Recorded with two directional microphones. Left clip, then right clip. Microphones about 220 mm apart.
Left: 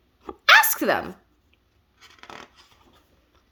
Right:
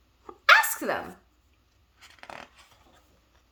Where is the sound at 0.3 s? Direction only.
35° left (ahead or behind).